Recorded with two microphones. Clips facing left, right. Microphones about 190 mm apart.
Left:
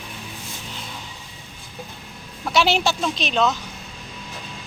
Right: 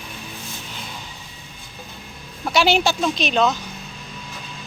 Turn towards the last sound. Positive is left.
turn(degrees=0)  # may be behind; listen again after turning